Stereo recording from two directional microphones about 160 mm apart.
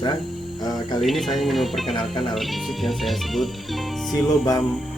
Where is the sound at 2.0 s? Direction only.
30° left (ahead or behind).